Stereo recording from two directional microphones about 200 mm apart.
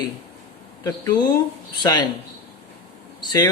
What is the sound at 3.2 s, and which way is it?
Speech, 20° left (ahead or behind).